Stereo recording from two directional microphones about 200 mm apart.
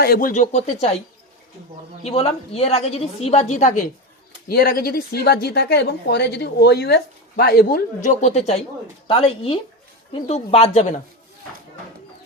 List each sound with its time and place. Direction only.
0.0 s speech: 45° left (ahead or behind)
2.0 s a woman's voice: 30° left (ahead or behind)
4.4 s a woman's voice: 50° left (ahead or behind)